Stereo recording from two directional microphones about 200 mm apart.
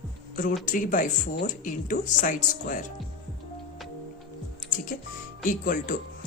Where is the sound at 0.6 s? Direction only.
40° left (ahead or behind).